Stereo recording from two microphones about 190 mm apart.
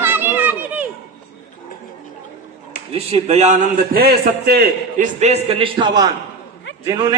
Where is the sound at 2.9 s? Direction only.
30° right (ahead or behind).